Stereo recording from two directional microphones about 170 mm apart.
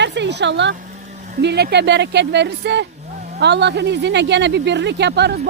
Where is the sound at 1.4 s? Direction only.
75° right (ahead or behind).